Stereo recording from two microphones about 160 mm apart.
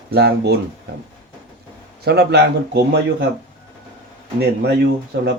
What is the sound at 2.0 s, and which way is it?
Speech, 90° right.